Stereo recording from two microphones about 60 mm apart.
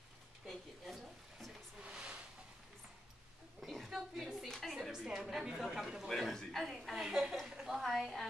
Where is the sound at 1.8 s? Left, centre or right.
Centre.